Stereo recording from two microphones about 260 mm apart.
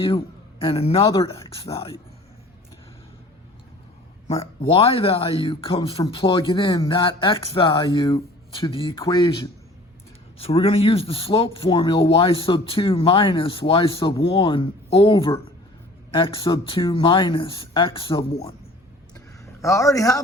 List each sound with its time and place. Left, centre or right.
0.6 s a man's voice: left
4.3 s a man's voice: left
19.6 s a man's voice: centre